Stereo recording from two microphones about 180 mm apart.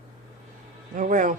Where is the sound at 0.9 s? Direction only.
45° right (ahead or behind).